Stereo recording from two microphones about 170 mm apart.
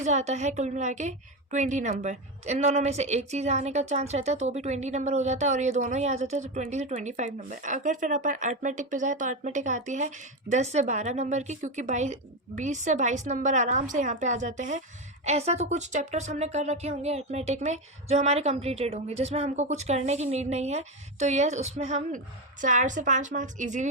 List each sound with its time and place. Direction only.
0.0 s a woman's voice: 45° right (ahead or behind)